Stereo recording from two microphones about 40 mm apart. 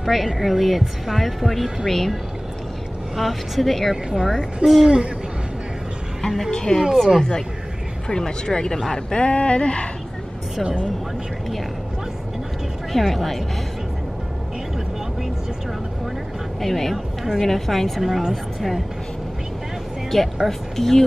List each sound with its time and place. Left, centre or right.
0.0 s speech: centre
3.2 s speech: centre
3.9 s speech: centre
4.6 s speech: centre
6.5 s speech: centre
9.2 s speech: left
10.6 s speech: right
12.9 s speech: centre
16.6 s speech: centre
16.9 s a woman's voice: centre
17.4 s speech: centre
20.1 s speech: centre